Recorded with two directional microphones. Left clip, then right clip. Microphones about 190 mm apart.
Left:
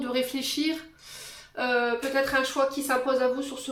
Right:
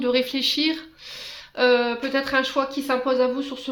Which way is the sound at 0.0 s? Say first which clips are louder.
Right 7 dB; 40° right (ahead or behind).